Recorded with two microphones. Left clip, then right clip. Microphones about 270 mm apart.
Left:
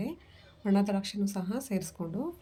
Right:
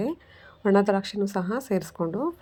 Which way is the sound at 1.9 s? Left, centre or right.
Right.